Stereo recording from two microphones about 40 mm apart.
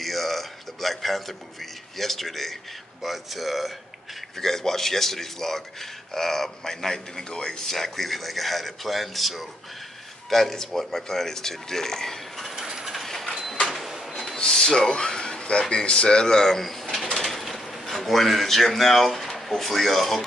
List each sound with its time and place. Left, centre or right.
0.0 s speech: centre
4.4 s a man's voice: centre
12.4 s coin: centre
13.0 s a sound: centre
13.4 s printer: centre
14.2 s a sound: centre
15.7 s speech: left; by 20.2 s centre